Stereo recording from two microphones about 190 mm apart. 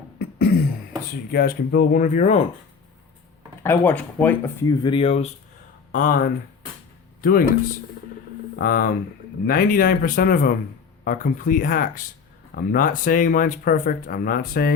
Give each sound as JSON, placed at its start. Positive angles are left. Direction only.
{"t": 0.2, "sound": "a sound", "side_deg": 55}
{"t": 1.3, "sound": "speech", "side_deg": 55}
{"t": 3.6, "sound": "speech", "side_deg": 10}
{"t": 5.9, "sound": "speech", "side_deg": 45}
{"t": 8.5, "sound": "speech", "side_deg": 50}